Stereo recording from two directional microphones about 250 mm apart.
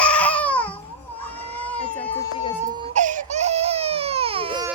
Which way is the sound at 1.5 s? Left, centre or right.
Centre.